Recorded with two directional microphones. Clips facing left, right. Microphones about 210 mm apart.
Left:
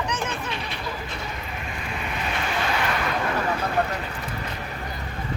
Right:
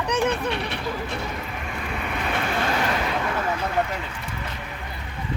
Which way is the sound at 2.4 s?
50° right (ahead or behind).